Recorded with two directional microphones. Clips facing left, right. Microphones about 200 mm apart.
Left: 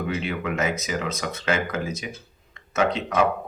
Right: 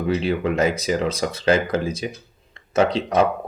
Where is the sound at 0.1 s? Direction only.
35° right (ahead or behind).